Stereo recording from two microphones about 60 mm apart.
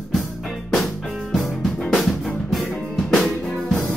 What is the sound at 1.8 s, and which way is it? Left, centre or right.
Music, centre.